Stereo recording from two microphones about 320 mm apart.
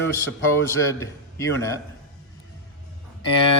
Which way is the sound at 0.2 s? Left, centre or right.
Centre.